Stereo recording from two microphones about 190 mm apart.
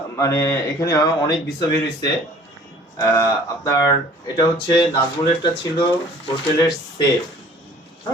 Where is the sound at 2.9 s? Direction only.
15° left (ahead or behind).